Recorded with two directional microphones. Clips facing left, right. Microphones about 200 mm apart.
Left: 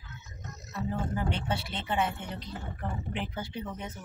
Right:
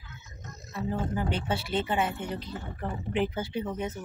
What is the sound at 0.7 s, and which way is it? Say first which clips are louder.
Speech: right 2 dB; 5° right (ahead or behind).